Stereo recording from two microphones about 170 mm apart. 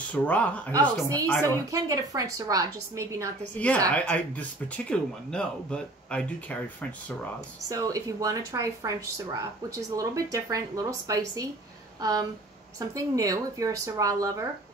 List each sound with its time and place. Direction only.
0.1 s speech: 10° left (ahead or behind)
0.7 s speech: 20° right (ahead or behind)
1.2 s speech: 10° left (ahead or behind)
1.7 s speech: 20° right (ahead or behind)
3.5 s speech: 10° left (ahead or behind)
7.6 s speech: 20° right (ahead or behind)